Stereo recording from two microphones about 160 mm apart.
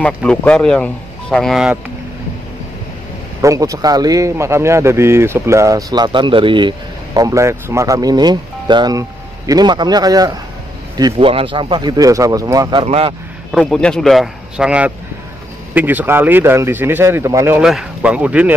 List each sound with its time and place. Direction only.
0.0 s speech: 5° left (ahead or behind)
3.3 s a man's voice: 20° right (ahead or behind)
7.2 s a man's voice: 20° right (ahead or behind)
12.8 s speech: 40° right (ahead or behind)
13.5 s a man's voice: centre (ahead or behind); by 17.6 s 20° right (ahead or behind)
17.6 s a man's voice: 5° right (ahead or behind)